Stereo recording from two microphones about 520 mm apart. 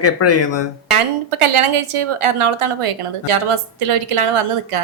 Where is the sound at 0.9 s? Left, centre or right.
Right.